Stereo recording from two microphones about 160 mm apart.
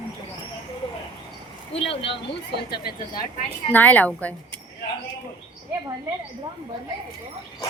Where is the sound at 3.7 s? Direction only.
10° left (ahead or behind).